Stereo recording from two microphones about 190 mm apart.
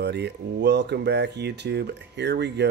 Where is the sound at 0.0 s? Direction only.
65° right (ahead or behind).